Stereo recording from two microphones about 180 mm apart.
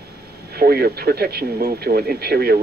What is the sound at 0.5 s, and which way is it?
Speech, 60° right (ahead or behind).